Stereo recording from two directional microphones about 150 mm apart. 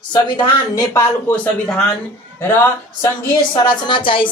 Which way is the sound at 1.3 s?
5° left (ahead or behind).